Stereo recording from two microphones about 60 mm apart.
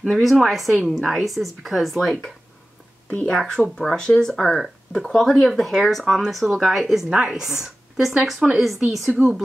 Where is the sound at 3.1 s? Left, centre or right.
Centre.